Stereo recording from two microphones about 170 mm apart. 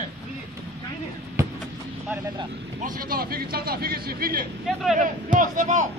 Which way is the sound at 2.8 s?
55° right (ahead or behind).